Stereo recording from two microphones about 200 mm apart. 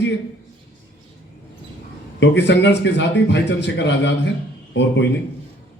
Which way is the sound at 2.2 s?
60° left (ahead or behind).